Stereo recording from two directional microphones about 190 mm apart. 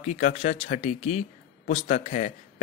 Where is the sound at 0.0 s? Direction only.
35° left (ahead or behind).